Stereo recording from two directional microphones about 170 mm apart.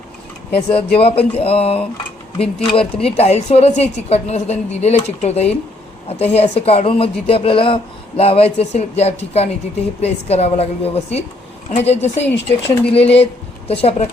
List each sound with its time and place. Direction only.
0.5 s speech: 35° left (ahead or behind)
12.2 s speech: 90° left
13.7 s speech: 35° left (ahead or behind)